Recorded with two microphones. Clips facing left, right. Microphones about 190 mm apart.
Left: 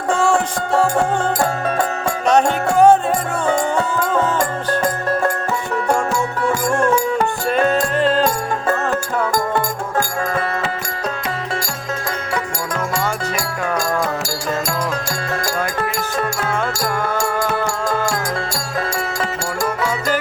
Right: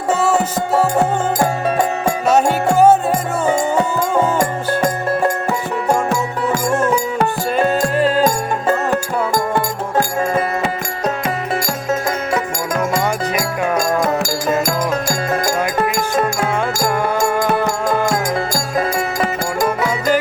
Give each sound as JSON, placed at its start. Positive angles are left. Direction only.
{"t": 0.1, "sound": "music", "side_deg": -5}
{"t": 7.5, "sound": "music", "side_deg": -5}
{"t": 13.3, "sound": "music", "side_deg": -20}
{"t": 16.0, "sound": "music", "side_deg": -15}